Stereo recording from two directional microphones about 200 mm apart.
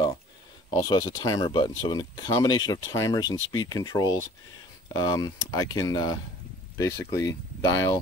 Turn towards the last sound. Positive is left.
turn(degrees=20)  # may be behind; listen again after turning